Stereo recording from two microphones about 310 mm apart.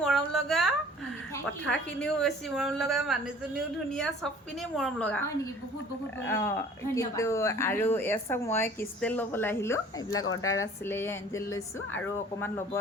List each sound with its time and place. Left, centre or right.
0.0 s a sound: centre
1.6 s a woman's voice: centre
6.2 s a woman's voice: centre
10.2 s speech: left
10.6 s a woman's voice: centre